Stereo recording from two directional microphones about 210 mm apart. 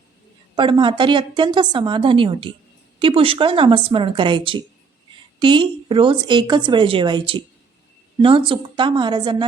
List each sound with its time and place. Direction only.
0.5 s speech: 25° right (ahead or behind)